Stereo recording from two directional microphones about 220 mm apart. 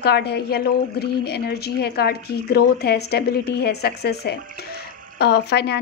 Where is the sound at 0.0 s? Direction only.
50° left (ahead or behind).